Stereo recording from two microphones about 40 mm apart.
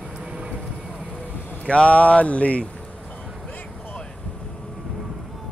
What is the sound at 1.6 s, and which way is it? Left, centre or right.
Speech, left.